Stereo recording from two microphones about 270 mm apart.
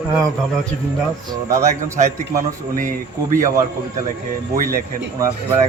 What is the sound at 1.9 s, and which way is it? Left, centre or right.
Speech, right.